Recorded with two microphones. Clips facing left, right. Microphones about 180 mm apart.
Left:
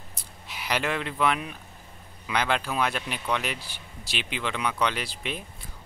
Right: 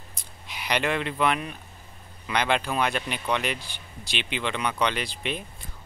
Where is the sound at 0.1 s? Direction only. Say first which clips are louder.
Right 1 dB; 5° left (ahead or behind).